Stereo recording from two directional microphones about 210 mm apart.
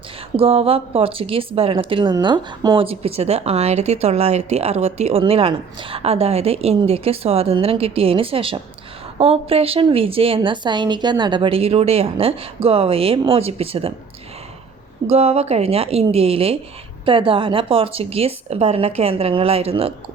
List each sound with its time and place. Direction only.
0.3 s a woman's voice: 30° right (ahead or behind)
15.1 s a woman's voice: 30° right (ahead or behind)